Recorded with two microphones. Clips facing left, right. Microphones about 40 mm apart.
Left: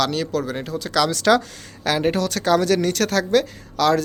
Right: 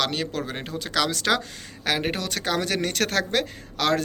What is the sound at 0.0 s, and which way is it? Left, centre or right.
Speech, right.